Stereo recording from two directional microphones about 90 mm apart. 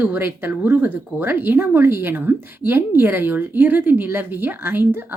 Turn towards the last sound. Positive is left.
turn(degrees=-25)  # may be behind; listen again after turning